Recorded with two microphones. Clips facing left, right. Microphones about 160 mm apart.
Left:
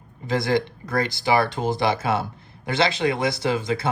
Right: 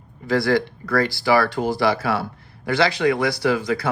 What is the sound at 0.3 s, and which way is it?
Speech, 20° left (ahead or behind).